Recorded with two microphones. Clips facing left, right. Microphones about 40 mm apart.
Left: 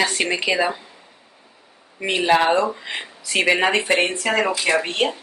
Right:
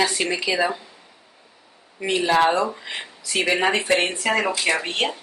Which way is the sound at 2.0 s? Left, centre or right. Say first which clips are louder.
Left 2 dB; left.